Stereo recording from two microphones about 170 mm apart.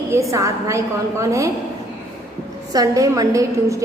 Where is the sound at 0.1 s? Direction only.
20° right (ahead or behind).